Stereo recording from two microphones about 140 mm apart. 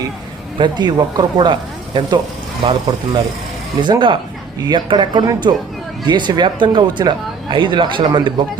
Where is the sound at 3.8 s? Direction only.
35° right (ahead or behind).